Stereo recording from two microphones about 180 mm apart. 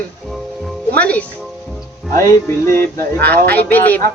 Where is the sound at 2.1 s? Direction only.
15° left (ahead or behind).